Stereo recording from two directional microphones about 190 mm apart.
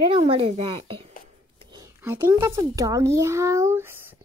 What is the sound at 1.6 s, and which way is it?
Whispering, 25° right (ahead or behind).